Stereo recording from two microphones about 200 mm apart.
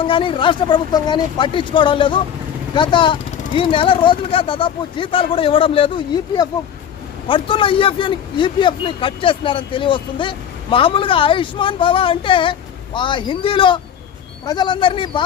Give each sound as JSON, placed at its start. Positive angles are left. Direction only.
{"t": 0.0, "sound": "speech", "side_deg": 25}